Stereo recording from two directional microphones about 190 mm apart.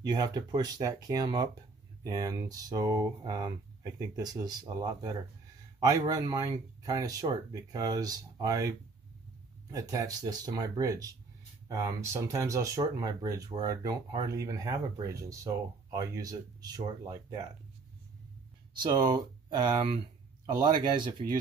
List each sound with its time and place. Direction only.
0.1 s speech: 20° right (ahead or behind)
18.8 s speech: 20° right (ahead or behind)